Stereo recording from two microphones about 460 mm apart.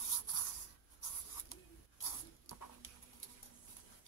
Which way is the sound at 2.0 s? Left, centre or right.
Left.